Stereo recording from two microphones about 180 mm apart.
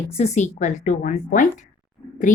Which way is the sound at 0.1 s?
35° left (ahead or behind).